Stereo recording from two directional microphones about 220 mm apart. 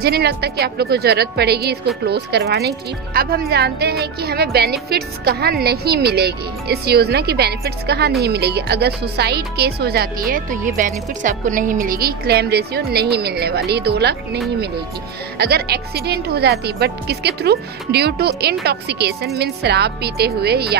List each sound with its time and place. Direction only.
0.0 s a woman's voice: 45° right (ahead or behind)